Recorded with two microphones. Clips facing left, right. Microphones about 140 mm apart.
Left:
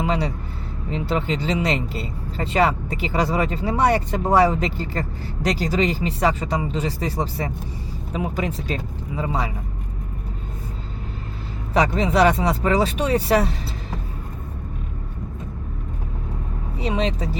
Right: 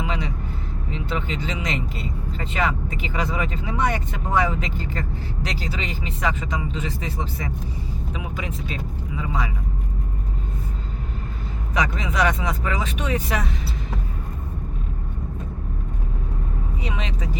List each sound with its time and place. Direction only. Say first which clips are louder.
0.0 s speech: left 5 dB; 35° left (ahead or behind)
11.7 s speech: left 6 dB; 35° left (ahead or behind)
16.8 s speech: left 10 dB; 35° left (ahead or behind)